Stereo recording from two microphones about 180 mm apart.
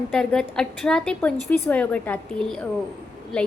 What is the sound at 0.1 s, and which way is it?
A woman's voice, 5° left (ahead or behind).